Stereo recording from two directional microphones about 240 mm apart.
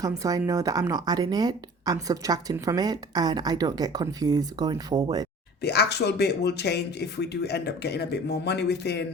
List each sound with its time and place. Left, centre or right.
0.0 s a woman's voice: centre
5.6 s speech: left